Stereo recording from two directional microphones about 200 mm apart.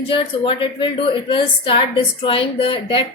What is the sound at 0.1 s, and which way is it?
A woman's voice, 25° left (ahead or behind).